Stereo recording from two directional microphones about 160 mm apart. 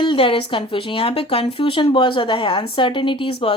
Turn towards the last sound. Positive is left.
turn(degrees=35)  # may be behind; listen again after turning